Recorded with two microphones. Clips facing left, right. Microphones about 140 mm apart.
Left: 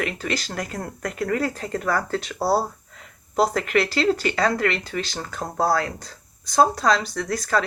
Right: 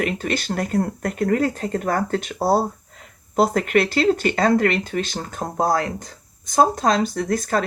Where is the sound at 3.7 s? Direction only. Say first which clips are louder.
Right 3 dB; 55° right (ahead or behind).